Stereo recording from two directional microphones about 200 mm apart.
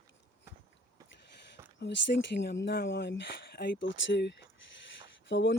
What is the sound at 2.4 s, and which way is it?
Speech, 55° left (ahead or behind).